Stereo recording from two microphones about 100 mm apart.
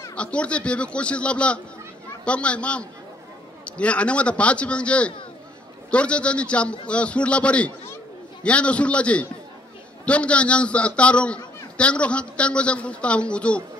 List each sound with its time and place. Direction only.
0.1 s a man's voice: 10° left (ahead or behind)